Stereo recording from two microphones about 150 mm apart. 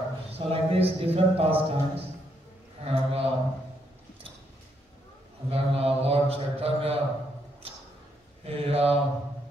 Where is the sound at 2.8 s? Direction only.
40° right (ahead or behind).